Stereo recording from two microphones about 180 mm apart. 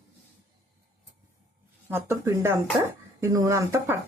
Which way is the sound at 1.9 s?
15° right (ahead or behind).